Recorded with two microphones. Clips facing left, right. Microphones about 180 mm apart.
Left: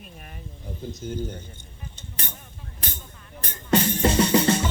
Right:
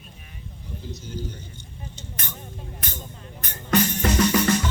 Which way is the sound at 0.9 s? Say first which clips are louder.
Left 4 dB; 55° left (ahead or behind).